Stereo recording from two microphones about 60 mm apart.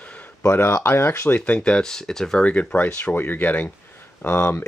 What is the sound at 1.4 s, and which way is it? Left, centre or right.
Speech, centre.